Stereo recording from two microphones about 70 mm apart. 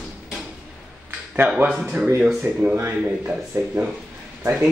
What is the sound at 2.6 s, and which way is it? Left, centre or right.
Speech, right.